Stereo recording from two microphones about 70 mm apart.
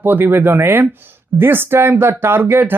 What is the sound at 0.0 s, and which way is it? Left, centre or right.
Speech, right.